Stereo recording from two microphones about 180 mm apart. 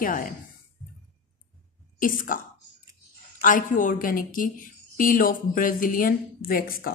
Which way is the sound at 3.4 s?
50° left (ahead or behind).